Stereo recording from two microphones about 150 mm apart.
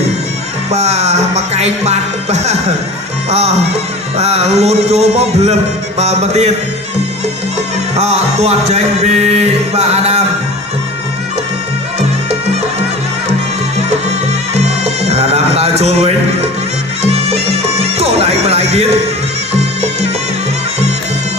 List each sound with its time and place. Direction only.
0.7 s music: 45° right (ahead or behind)
7.9 s music: 45° right (ahead or behind)
15.0 s sheep: 45° right (ahead or behind)
17.0 s bagpipes: 45° right (ahead or behind)